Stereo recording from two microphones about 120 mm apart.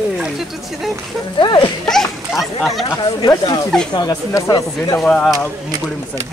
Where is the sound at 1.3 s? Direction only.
40° left (ahead or behind).